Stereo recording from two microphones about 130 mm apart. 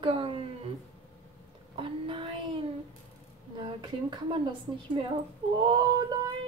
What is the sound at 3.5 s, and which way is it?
A woman's voice, 35° right (ahead or behind).